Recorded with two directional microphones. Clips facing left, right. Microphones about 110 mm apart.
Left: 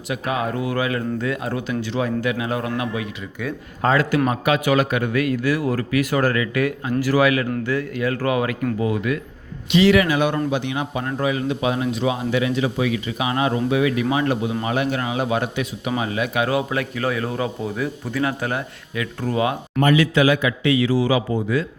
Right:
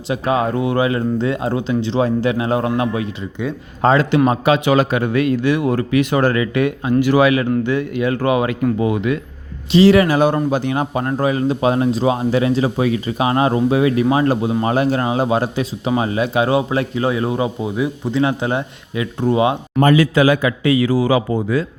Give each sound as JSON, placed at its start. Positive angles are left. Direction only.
{"t": 0.1, "sound": "speech", "side_deg": -30}
{"t": 9.7, "sound": "speech", "side_deg": -35}
{"t": 19.8, "sound": "speech", "side_deg": -40}